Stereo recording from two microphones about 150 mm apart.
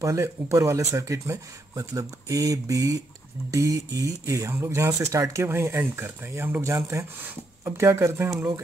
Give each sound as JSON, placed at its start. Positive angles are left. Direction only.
{"t": 0.0, "sound": "speech", "side_deg": -20}